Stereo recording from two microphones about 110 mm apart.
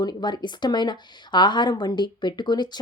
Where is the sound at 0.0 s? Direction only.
40° left (ahead or behind).